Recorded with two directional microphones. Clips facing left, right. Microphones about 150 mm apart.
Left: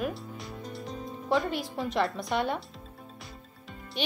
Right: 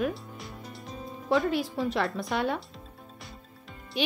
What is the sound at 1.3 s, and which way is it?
A woman's voice, centre (ahead or behind).